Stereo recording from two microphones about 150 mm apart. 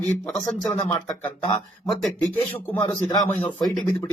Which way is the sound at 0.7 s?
20° left (ahead or behind).